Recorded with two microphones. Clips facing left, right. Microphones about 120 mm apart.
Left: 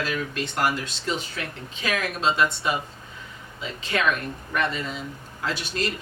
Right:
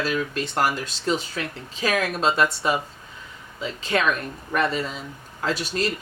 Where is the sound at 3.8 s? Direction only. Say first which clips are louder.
Right 2 dB; 35° right (ahead or behind).